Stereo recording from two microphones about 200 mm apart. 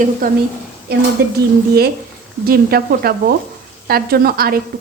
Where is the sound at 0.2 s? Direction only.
45° right (ahead or behind).